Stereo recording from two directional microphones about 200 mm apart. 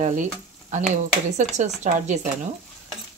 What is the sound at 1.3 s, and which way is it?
Speech, 35° right (ahead or behind).